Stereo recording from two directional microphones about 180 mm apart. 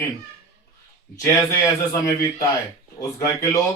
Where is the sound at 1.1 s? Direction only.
15° left (ahead or behind).